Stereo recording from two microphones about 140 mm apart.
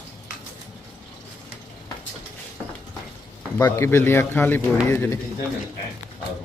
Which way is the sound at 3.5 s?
20° left (ahead or behind).